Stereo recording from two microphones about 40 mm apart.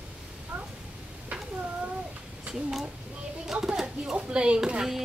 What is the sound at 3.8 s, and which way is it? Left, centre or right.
Speech, right.